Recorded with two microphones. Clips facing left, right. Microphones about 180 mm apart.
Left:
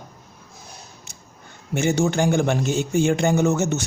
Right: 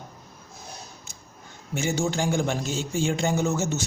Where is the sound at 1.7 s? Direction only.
60° left (ahead or behind).